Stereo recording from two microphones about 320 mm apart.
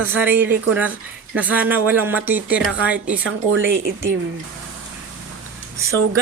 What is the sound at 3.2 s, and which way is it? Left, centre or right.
Speech, right.